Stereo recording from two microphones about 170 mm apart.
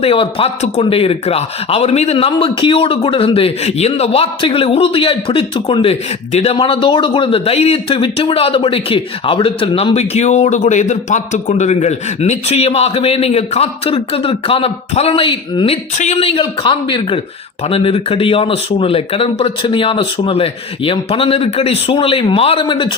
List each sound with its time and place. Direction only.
0.0 s a man's voice: 30° left (ahead or behind)